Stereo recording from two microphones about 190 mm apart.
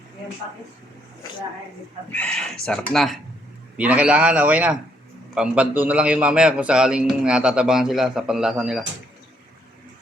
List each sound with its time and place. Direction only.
2.1 s a man's voice: 5° left (ahead or behind)